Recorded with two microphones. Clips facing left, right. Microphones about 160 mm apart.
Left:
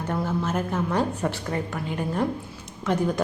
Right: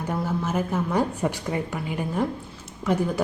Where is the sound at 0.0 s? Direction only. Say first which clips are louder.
Even; 10° right (ahead or behind).